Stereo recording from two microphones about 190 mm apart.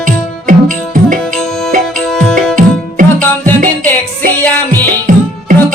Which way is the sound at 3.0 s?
45° right (ahead or behind).